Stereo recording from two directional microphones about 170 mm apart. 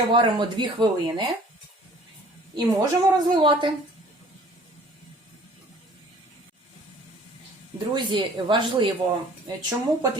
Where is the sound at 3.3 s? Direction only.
30° right (ahead or behind).